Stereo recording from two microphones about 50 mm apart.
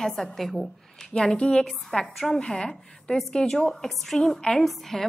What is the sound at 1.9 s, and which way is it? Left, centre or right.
A woman's voice, centre.